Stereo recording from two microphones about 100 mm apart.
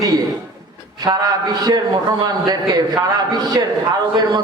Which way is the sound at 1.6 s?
40° right (ahead or behind).